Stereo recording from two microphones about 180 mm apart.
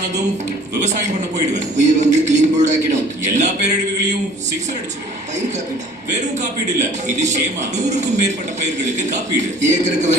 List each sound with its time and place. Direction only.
1.5 s a man's voice: 40° right (ahead or behind)
6.7 s a man's voice: 40° right (ahead or behind)